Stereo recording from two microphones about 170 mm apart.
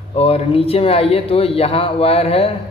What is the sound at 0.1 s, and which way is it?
A man's voice, 35° left (ahead or behind).